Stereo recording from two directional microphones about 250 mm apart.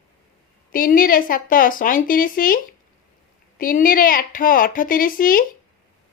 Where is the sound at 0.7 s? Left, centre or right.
Left.